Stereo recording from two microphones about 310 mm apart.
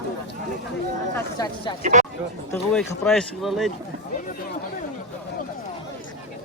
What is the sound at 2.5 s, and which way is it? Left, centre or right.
Speech, centre.